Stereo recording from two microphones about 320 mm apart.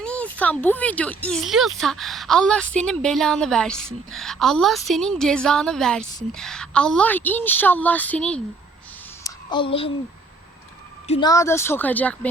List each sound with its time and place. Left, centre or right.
0.0 s speech: centre
9.2 s a sound: centre
11.1 s speech: centre